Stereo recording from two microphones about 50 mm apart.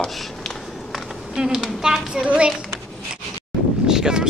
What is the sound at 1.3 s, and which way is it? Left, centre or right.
Speech, centre.